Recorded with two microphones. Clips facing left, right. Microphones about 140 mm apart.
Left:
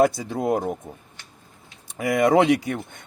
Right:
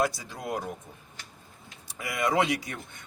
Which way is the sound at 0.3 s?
55° left (ahead or behind).